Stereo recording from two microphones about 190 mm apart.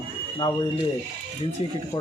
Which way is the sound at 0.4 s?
25° left (ahead or behind).